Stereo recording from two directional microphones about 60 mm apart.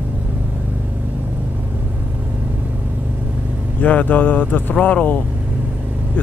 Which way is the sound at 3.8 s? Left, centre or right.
Left.